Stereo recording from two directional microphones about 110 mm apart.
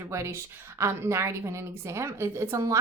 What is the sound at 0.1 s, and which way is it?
A woman's voice, 25° right (ahead or behind).